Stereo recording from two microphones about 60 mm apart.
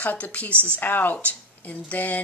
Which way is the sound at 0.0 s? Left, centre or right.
Left.